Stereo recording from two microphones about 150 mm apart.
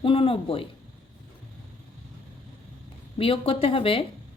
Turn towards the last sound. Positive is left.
turn(degrees=35)  # may be behind; listen again after turning